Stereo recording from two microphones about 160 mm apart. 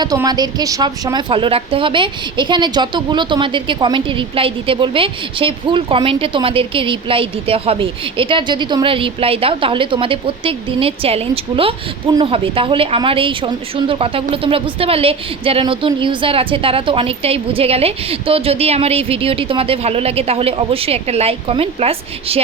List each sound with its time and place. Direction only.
0.0 s a woman's voice: 25° right (ahead or behind)